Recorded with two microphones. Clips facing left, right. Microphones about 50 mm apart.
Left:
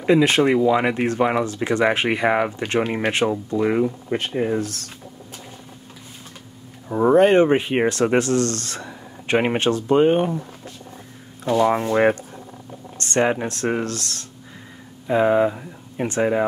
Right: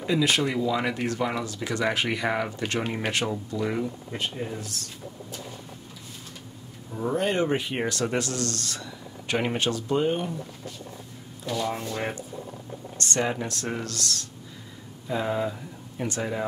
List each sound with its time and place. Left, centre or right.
0.0 s speech: left
6.9 s speech: left
11.4 s speech: left
11.7 s speech: left
13.0 s speech: left